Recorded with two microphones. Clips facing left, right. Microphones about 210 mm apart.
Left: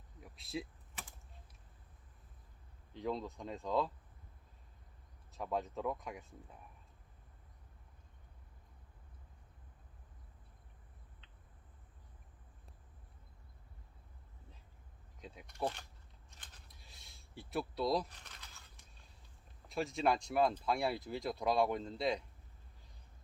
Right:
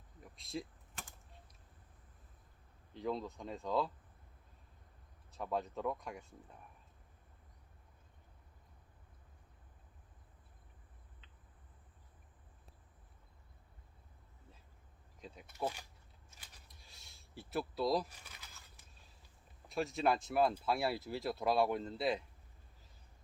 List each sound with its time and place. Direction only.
0.2 s a sound: centre (ahead or behind)
2.9 s speech: centre (ahead or behind)
5.3 s speech: centre (ahead or behind)
15.2 s speech: centre (ahead or behind)
16.3 s a sound: 5° right (ahead or behind)
19.6 s speech: centre (ahead or behind)